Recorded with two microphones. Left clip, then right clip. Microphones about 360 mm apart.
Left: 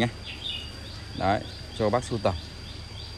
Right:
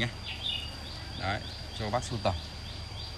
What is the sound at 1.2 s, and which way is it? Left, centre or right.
Speech, centre.